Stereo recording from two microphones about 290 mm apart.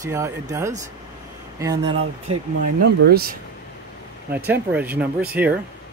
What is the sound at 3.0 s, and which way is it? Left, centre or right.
Speech, right.